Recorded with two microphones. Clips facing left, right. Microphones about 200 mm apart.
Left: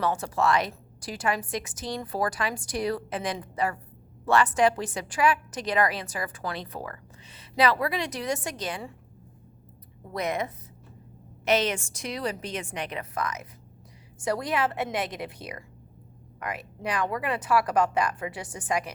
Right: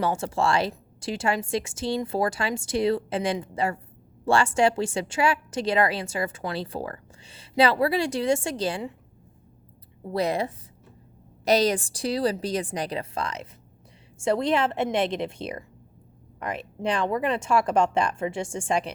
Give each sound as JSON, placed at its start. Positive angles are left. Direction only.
{"t": 0.0, "sound": "a woman's voice", "side_deg": -25}
{"t": 10.1, "sound": "a woman's voice", "side_deg": -30}